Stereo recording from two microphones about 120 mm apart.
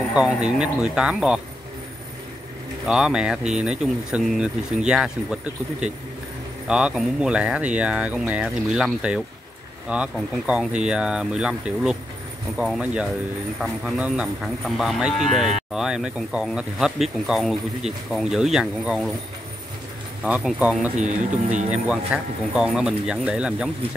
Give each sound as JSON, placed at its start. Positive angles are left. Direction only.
{"t": 0.1, "sound": "speech", "side_deg": -10}
{"t": 2.9, "sound": "speech", "side_deg": -5}
{"t": 20.2, "sound": "speech", "side_deg": -10}
{"t": 21.0, "sound": "speech", "side_deg": -90}
{"t": 21.6, "sound": "speech", "side_deg": -10}